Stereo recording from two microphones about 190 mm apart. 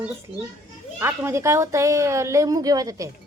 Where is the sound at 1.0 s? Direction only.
10° right (ahead or behind).